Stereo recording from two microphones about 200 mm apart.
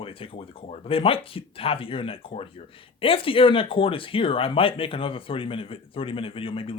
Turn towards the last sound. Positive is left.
turn(degrees=25)  # may be behind; listen again after turning